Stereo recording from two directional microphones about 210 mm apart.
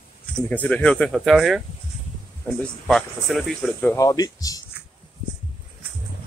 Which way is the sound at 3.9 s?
15° left (ahead or behind).